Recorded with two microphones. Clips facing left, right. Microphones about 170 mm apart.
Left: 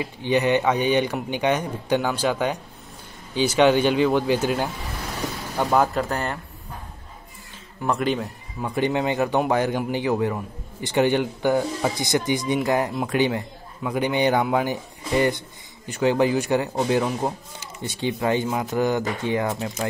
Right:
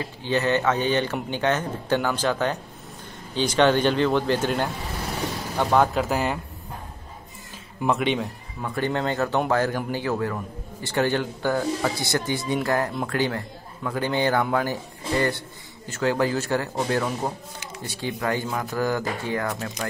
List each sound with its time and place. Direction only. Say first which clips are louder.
0.0 s a man's voice: left 3 dB; 15° left (ahead or behind); by 6.4 s 5° right (ahead or behind)
7.8 s a man's voice: even; centre (ahead or behind)
8.6 s a man's voice: left 3 dB; 15° left (ahead or behind)